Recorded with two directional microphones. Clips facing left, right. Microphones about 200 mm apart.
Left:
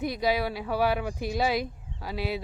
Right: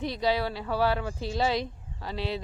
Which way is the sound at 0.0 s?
10° left (ahead or behind).